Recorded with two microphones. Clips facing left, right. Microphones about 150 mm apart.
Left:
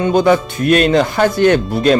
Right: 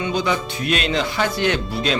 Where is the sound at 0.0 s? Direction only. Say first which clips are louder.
Left 10 dB; 50° left (ahead or behind).